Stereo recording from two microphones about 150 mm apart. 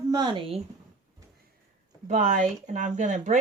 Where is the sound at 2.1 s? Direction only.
55° right (ahead or behind).